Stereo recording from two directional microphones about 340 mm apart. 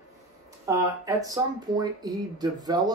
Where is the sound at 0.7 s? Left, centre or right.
Centre.